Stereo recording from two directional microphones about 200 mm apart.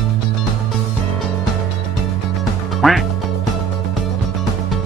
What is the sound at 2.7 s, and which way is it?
Speech, centre (ahead or behind).